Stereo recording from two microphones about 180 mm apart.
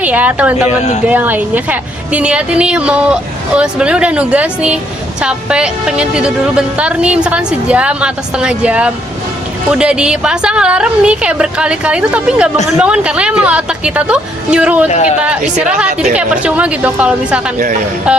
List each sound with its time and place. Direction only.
0.0 s a woman's voice: 10° right (ahead or behind)
14.8 s speech: 40° left (ahead or behind)
15.2 s a woman's voice: 5° right (ahead or behind)